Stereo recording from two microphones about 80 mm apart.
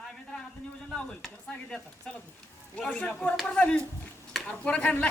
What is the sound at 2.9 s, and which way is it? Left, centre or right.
Speech, centre.